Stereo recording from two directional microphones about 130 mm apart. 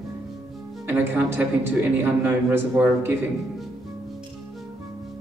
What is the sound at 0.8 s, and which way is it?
A man's voice, 15° right (ahead or behind).